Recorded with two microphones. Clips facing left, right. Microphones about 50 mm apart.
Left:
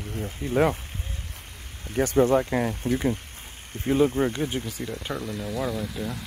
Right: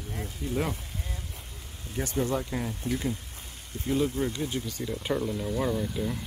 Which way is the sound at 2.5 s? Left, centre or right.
Left.